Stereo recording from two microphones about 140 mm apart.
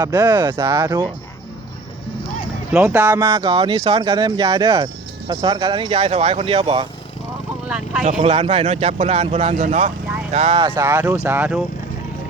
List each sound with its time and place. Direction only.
0.2 s speech: 15° right (ahead or behind)
2.7 s speech: 15° right (ahead or behind)
5.3 s speech: 35° right (ahead or behind)
5.9 s speech: 50° right (ahead or behind)
8.2 s speech: 45° right (ahead or behind); by 9.9 s 65° right (ahead or behind)
10.3 s speech: 50° right (ahead or behind)
10.6 s speech: 20° right (ahead or behind)